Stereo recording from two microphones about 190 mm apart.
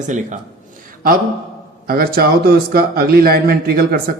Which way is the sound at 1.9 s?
50° right (ahead or behind).